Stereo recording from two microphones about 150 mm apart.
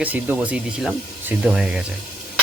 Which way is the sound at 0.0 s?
10° right (ahead or behind).